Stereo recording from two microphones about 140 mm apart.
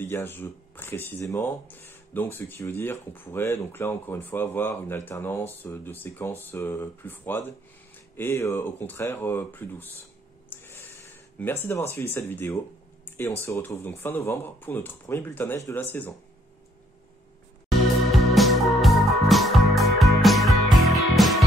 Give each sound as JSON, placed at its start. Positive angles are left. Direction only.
{"t": 0.0, "sound": "speech", "side_deg": 15}
{"t": 10.5, "sound": "a sound", "side_deg": 15}
{"t": 11.6, "sound": "speech", "side_deg": 15}
{"t": 18.1, "sound": "music", "side_deg": 0}